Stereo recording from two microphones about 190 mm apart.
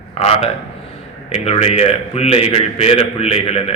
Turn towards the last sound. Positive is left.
turn(degrees=30)  # may be behind; listen again after turning